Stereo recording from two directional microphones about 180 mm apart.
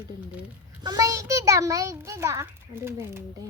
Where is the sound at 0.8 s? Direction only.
20° right (ahead or behind).